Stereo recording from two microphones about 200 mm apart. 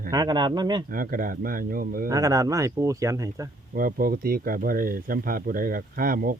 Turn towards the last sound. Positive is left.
turn(degrees=-45)  # may be behind; listen again after turning